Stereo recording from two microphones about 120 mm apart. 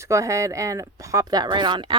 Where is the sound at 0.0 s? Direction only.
25° right (ahead or behind).